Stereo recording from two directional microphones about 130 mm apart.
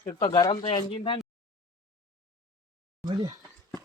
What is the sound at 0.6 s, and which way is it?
Speech, 45° left (ahead or behind).